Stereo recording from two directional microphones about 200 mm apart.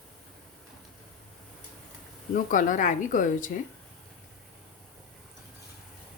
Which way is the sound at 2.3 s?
40° left (ahead or behind).